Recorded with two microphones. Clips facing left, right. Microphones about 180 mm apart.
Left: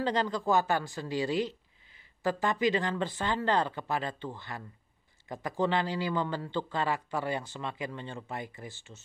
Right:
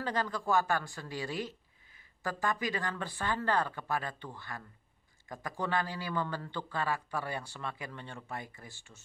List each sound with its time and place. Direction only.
0.0 s speech: 25° left (ahead or behind)